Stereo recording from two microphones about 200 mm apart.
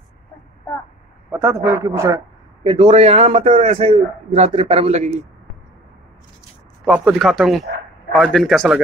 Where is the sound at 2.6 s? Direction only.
25° right (ahead or behind).